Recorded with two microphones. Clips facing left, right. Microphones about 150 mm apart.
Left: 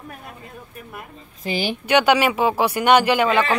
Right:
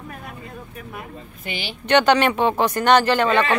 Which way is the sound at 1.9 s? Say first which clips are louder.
Right 1 dB; 10° left (ahead or behind).